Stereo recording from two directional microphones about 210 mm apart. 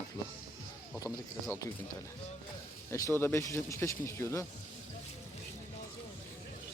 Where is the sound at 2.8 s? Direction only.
15° left (ahead or behind).